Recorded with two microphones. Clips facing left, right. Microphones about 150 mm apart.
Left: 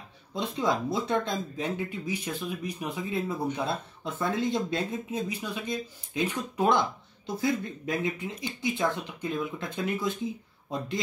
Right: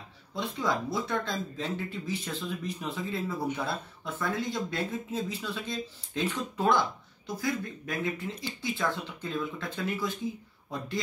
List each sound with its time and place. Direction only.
0.3 s speech: 20° left (ahead or behind)